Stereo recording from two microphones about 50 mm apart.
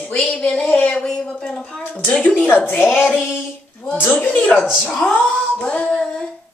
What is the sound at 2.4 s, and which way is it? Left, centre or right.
A woman's voice, left.